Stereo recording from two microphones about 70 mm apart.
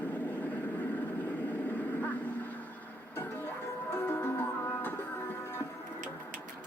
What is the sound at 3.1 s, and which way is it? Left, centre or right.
Music, left.